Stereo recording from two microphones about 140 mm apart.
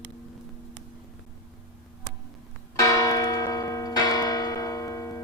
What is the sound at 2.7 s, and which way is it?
Church bell, 20° left (ahead or behind).